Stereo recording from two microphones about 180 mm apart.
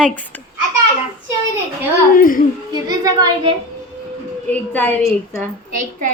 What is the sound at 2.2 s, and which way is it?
Speech, 50° left (ahead or behind).